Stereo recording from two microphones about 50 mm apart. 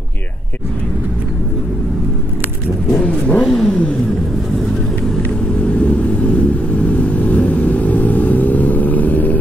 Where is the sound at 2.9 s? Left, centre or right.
Left.